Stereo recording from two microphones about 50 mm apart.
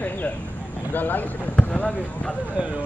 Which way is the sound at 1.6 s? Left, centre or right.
Left.